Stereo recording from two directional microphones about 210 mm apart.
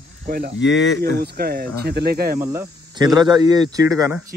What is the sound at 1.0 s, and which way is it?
Speech, 50° right (ahead or behind).